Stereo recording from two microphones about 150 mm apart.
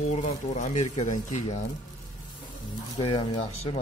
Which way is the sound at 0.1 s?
50° left (ahead or behind).